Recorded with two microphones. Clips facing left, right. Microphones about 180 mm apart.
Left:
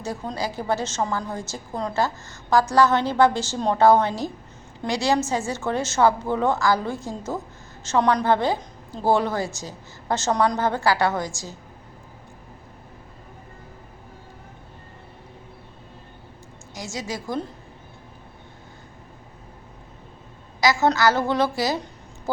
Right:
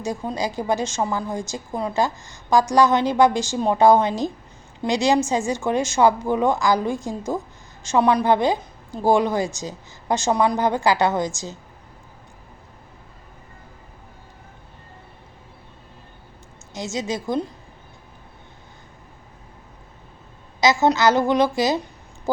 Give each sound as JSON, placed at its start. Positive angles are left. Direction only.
{"t": 0.0, "sound": "a woman's voice", "side_deg": -15}
{"t": 16.7, "sound": "a woman's voice", "side_deg": -20}
{"t": 20.6, "sound": "a woman's voice", "side_deg": -20}